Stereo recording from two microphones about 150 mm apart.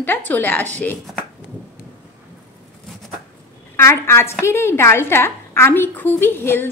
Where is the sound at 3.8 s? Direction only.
15° left (ahead or behind).